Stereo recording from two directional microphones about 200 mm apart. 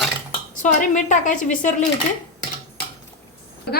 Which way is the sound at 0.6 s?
40° left (ahead or behind).